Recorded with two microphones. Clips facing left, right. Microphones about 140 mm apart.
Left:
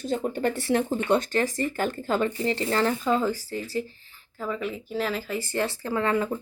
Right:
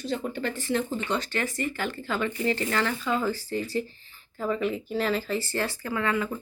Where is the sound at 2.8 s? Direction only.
35° left (ahead or behind).